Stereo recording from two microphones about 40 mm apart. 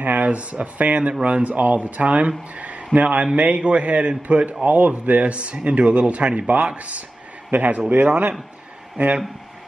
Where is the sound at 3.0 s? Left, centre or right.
Right.